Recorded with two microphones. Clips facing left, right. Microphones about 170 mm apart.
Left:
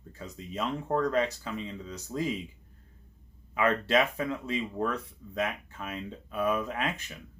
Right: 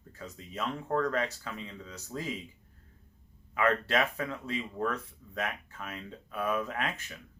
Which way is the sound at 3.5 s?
20° left (ahead or behind).